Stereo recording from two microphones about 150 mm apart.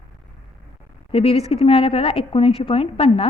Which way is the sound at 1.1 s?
40° left (ahead or behind).